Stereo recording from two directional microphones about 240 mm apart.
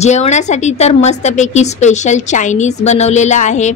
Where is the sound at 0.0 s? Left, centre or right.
Left.